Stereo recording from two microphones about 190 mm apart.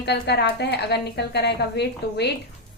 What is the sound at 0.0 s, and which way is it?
Speech, 60° left (ahead or behind).